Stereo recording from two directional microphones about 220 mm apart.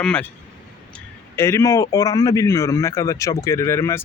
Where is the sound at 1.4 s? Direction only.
10° left (ahead or behind).